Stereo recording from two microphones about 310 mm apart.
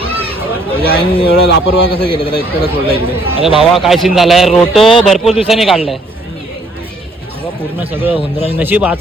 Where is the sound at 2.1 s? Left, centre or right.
Centre.